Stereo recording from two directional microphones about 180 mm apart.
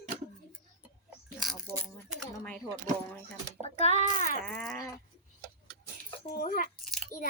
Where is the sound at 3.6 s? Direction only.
35° left (ahead or behind).